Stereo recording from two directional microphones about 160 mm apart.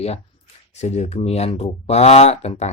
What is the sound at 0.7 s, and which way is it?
Speech, 45° left (ahead or behind).